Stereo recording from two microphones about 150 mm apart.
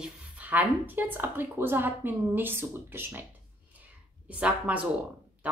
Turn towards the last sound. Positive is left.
turn(degrees=-10)  # may be behind; listen again after turning